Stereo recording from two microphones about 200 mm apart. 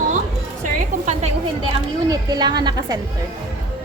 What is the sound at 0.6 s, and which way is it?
Speech, 35° right (ahead or behind).